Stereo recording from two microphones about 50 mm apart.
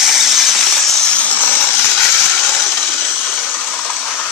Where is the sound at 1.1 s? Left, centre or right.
Left.